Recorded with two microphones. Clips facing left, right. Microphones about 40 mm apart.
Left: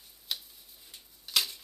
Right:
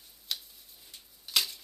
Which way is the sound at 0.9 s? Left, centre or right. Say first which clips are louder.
Even; centre.